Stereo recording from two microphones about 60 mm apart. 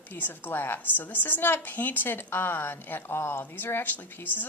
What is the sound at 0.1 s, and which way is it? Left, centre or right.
A woman's voice, left.